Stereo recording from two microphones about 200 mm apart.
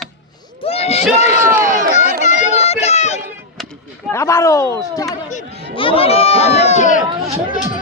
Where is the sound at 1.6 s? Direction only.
45° right (ahead or behind).